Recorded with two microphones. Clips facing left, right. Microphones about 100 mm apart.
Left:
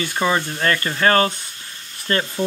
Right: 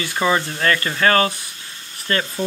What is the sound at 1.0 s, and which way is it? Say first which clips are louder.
Speech: left 1 dB; 30° left (ahead or behind).